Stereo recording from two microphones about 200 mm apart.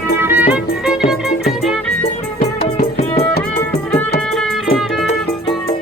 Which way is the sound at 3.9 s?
5° left (ahead or behind).